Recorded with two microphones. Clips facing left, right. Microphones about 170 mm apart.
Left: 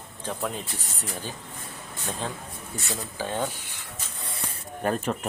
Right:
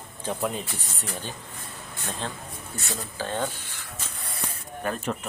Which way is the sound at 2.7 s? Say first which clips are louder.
Left 1 dB; 15° left (ahead or behind).